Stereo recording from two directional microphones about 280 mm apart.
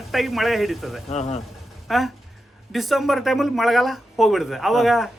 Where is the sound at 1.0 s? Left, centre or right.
Left.